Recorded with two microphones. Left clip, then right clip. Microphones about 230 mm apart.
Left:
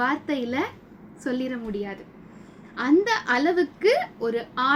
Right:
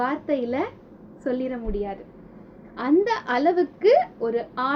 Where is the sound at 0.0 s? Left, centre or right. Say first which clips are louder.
Right 1 dB; left.